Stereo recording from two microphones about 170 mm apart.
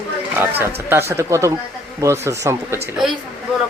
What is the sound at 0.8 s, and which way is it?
Speech, 15° right (ahead or behind).